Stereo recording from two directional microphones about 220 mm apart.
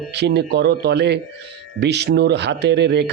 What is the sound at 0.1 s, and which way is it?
Speech, 50° right (ahead or behind).